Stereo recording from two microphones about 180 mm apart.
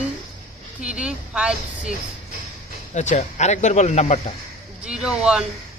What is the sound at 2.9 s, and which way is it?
Speech, 40° left (ahead or behind).